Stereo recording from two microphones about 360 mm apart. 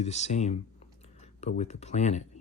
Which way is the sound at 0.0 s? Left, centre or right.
Centre.